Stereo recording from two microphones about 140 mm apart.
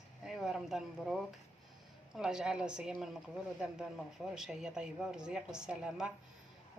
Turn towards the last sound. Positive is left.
turn(degrees=-5)  # may be behind; listen again after turning